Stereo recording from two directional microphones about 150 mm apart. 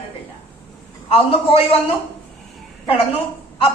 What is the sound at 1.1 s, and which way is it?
Speech, 40° left (ahead or behind).